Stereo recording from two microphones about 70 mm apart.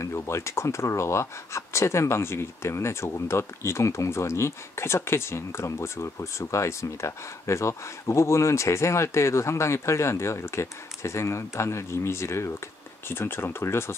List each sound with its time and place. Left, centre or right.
0.0 s speech: left